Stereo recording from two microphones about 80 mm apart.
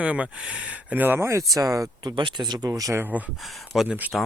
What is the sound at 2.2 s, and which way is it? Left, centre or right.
Speech, right.